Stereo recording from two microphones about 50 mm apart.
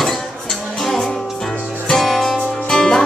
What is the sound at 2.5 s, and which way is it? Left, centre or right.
Music, centre.